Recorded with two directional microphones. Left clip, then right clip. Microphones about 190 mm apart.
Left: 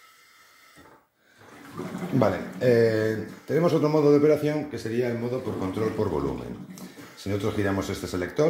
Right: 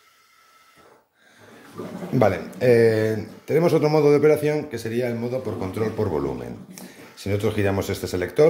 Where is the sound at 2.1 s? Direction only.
40° right (ahead or behind).